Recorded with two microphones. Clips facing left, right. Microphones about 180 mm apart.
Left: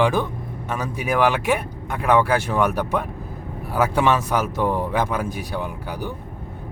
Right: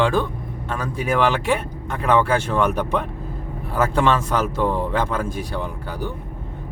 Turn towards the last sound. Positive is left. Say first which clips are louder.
# right 1 dB
turn(degrees=15)  # may be behind; listen again after turning